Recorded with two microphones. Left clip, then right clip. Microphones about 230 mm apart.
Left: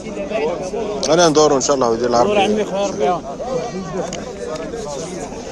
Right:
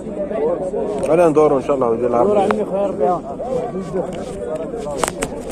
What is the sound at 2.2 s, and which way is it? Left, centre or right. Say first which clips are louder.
Speech: even; left.